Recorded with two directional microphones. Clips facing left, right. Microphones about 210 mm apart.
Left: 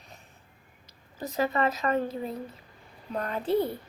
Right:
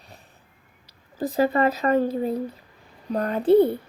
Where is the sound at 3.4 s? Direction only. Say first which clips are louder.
Right 11 dB; 60° right (ahead or behind).